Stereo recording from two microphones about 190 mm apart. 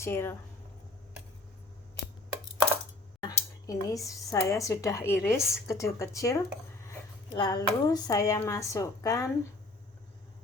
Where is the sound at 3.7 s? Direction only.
20° left (ahead or behind).